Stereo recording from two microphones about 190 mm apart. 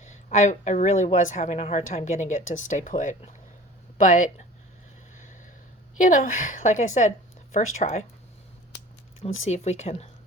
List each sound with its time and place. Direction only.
0.0 s speech: 40° left (ahead or behind)
5.1 s a sound: 40° left (ahead or behind)
6.0 s speech: 45° left (ahead or behind)
9.4 s speech: 35° left (ahead or behind)